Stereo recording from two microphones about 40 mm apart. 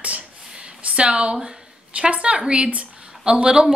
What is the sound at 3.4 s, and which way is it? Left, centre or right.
Speech, centre.